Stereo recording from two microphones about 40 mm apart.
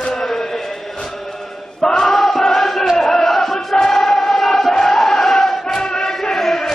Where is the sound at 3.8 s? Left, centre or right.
Centre.